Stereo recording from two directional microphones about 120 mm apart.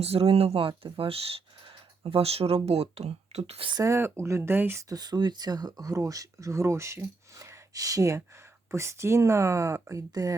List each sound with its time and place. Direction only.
0.0 s speech: 55° right (ahead or behind)
3.7 s speech: 30° right (ahead or behind)